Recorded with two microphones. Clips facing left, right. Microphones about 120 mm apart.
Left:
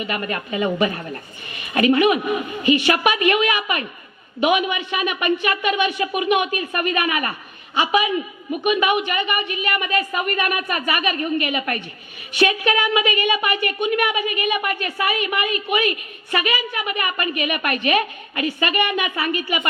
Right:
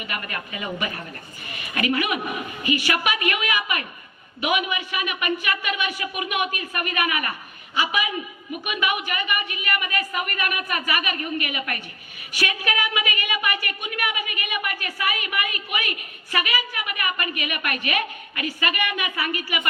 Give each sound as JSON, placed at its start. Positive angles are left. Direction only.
{"t": 0.0, "sound": "a woman's voice", "side_deg": 30}